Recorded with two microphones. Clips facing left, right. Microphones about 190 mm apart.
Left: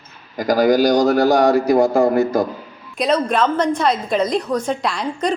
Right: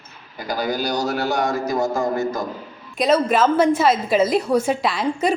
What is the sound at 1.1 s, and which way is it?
Speech, 35° left (ahead or behind).